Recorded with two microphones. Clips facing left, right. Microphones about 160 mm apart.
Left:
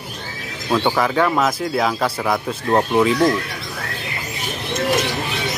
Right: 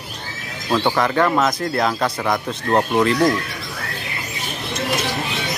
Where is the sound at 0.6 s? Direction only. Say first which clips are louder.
Even; 5° left (ahead or behind).